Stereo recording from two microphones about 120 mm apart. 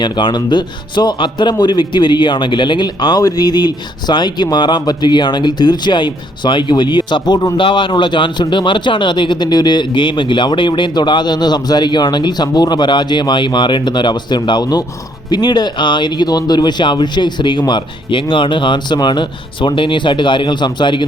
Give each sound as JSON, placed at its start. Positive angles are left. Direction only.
{"t": 0.0, "sound": "a man's voice", "side_deg": 40}